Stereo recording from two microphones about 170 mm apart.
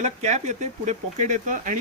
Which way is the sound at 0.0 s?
40° right (ahead or behind).